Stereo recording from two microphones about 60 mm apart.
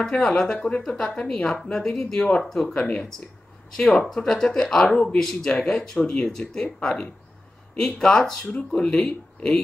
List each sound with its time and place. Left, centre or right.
0.0 s speech: centre
0.6 s speech: centre